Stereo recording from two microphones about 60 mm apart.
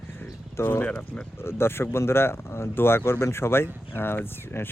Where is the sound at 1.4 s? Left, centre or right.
Left.